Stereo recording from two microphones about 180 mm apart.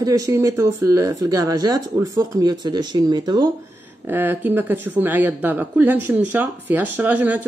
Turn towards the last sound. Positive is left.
turn(degrees=-10)  # may be behind; listen again after turning